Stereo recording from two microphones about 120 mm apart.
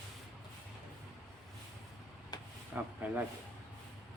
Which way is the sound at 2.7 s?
15° right (ahead or behind).